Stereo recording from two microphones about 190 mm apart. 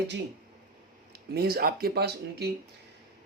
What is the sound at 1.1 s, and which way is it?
A man's voice, 55° right (ahead or behind).